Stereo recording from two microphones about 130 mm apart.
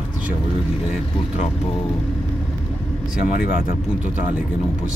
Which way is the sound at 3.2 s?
85° left.